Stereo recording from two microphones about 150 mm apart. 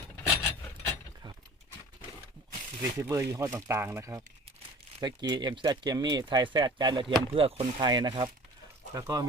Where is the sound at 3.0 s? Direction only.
20° right (ahead or behind).